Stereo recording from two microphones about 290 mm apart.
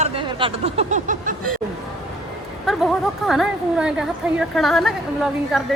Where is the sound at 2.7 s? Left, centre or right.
Centre.